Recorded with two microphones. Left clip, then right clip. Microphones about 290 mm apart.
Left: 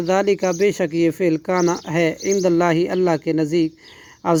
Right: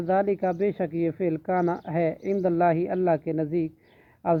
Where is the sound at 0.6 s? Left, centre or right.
Left.